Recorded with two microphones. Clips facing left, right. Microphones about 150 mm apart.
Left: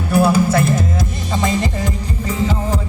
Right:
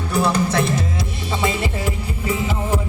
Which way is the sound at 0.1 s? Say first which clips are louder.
Left 5 dB; 5° left (ahead or behind).